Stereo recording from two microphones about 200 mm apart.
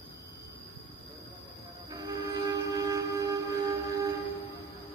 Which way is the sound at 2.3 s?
20° right (ahead or behind).